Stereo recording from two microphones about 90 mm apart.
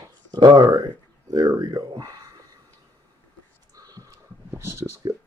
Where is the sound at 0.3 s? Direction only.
55° right (ahead or behind).